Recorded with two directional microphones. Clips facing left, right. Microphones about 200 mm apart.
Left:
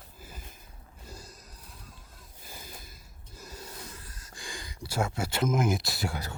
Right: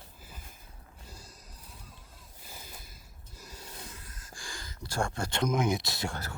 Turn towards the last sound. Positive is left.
turn(degrees=5)  # may be behind; listen again after turning